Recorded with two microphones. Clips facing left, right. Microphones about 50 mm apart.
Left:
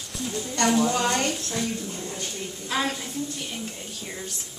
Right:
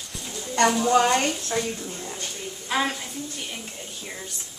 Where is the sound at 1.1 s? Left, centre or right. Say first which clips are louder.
Right 3 dB; right.